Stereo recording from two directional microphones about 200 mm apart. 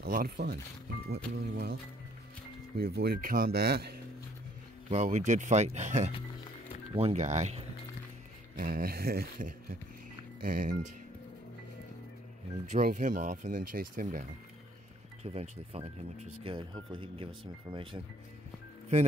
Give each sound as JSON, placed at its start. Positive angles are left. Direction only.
{"t": 0.0, "sound": "speech", "side_deg": -50}
{"t": 2.8, "sound": "speech", "side_deg": -55}
{"t": 4.8, "sound": "speech", "side_deg": -35}
{"t": 8.5, "sound": "speech", "side_deg": -45}
{"t": 12.7, "sound": "speech", "side_deg": -40}
{"t": 15.2, "sound": "speech", "side_deg": -30}